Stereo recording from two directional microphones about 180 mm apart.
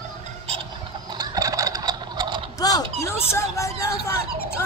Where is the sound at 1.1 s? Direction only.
20° right (ahead or behind).